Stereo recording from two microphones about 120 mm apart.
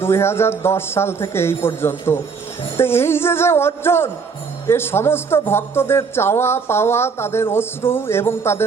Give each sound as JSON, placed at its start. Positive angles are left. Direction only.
{"t": 0.0, "sound": "a man's voice", "side_deg": 20}